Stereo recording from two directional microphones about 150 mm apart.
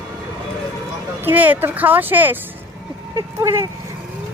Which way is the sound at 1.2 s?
10° right (ahead or behind).